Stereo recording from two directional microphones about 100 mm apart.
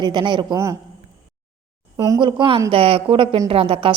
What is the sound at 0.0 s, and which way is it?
Speech, 50° right (ahead or behind).